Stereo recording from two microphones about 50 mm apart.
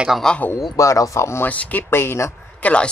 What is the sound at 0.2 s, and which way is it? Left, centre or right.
Speech, centre.